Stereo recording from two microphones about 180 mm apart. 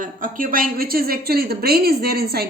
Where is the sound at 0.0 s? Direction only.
50° right (ahead or behind).